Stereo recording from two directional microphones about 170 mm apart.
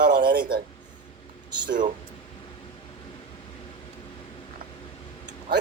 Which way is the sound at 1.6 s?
50° right (ahead or behind).